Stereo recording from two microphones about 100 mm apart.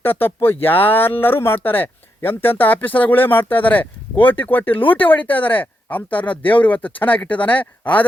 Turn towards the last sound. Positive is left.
turn(degrees=15)  # may be behind; listen again after turning